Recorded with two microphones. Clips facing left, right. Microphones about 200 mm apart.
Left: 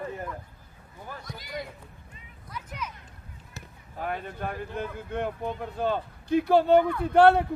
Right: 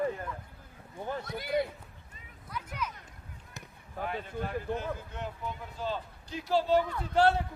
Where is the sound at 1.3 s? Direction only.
60° right (ahead or behind).